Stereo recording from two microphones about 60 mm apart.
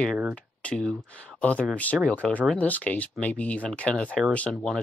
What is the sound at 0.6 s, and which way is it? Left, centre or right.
Speech, left.